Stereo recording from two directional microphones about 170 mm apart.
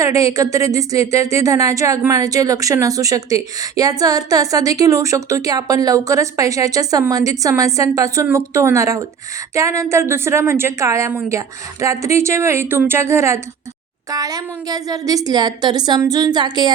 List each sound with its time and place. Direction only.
0.0 s speech: 20° right (ahead or behind)